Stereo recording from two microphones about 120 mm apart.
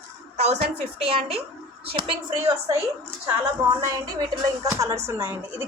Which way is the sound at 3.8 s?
30° right (ahead or behind).